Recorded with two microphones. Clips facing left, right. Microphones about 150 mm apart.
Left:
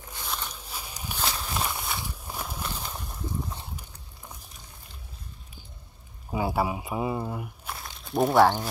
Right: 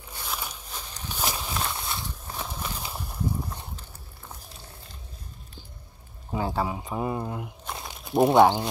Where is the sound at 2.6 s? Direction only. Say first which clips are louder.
Right 1 dB; 5° right (ahead or behind).